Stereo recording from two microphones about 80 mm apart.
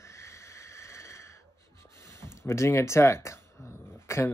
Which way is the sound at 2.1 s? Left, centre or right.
Left.